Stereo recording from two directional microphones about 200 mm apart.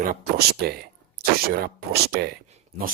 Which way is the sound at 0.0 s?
50° right (ahead or behind).